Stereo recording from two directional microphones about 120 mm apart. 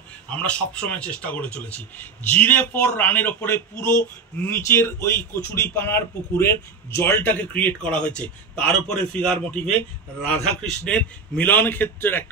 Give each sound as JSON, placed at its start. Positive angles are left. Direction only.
{"t": 0.3, "sound": "speech", "side_deg": 10}